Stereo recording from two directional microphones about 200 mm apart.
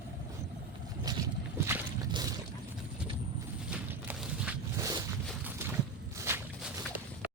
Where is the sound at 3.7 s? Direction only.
5° right (ahead or behind).